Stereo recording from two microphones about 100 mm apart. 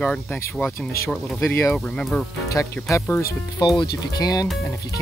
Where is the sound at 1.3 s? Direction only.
25° left (ahead or behind).